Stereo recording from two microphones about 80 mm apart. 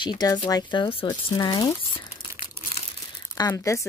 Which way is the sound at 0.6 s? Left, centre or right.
Left.